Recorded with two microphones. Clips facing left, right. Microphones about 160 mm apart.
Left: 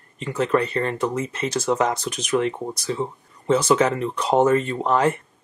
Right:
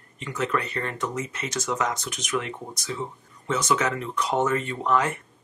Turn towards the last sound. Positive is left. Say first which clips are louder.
# left 4 dB
turn(degrees=30)  # may be behind; listen again after turning